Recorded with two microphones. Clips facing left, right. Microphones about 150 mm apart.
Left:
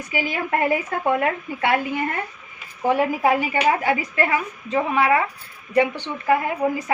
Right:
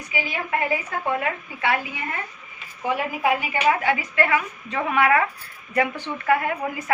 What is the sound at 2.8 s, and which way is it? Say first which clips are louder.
A woman's voice: left 4 dB; 35° left (ahead or behind).